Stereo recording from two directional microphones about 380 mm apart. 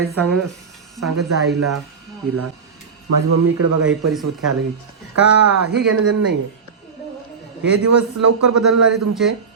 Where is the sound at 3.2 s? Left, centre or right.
Right.